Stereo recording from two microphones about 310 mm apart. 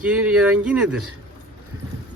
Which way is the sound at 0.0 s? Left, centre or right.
Centre.